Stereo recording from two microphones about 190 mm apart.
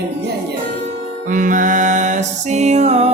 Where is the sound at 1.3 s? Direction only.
45° right (ahead or behind).